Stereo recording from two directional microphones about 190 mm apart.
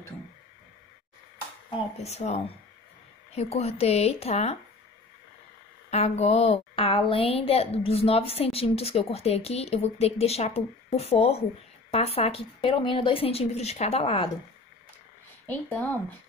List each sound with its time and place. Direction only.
2.0 s a woman's voice: 35° left (ahead or behind)
5.9 s a woman's voice: 35° left (ahead or behind)
15.4 s speech: 10° left (ahead or behind)